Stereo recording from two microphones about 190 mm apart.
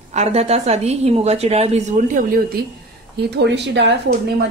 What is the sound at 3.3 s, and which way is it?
Speech, 65° right (ahead or behind).